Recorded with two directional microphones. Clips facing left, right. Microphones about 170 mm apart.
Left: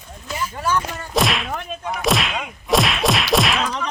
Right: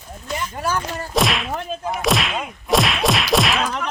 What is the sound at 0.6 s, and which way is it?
Speech, 40° right (ahead or behind).